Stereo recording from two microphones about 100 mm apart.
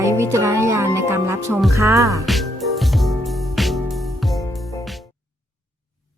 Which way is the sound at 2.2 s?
Centre (ahead or behind).